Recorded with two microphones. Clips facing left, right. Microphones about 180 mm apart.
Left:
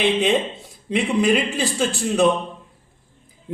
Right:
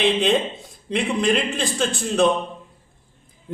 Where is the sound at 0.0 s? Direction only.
5° left (ahead or behind).